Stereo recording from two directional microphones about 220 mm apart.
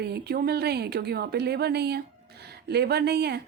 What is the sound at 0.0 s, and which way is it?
Speech, 45° right (ahead or behind).